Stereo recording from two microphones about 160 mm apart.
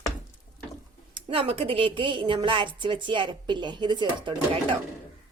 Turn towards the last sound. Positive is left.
turn(degrees=-30)  # may be behind; listen again after turning